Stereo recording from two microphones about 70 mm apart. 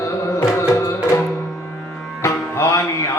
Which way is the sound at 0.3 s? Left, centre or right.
Left.